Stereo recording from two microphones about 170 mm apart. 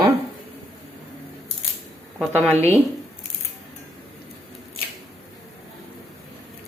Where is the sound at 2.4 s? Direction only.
10° left (ahead or behind).